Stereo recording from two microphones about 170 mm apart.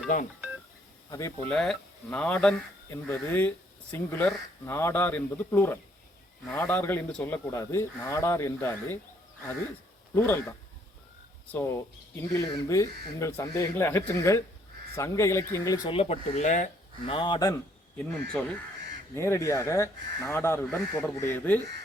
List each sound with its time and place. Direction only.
0.1 s speech: 55° left (ahead or behind)
1.5 s speech: centre (ahead or behind)
10.2 s speech: 15° left (ahead or behind)
12.1 s speech: 20° left (ahead or behind)
15.9 s speech: 35° left (ahead or behind)
17.1 s speech: 30° left (ahead or behind)
17.9 s speech: 5° left (ahead or behind)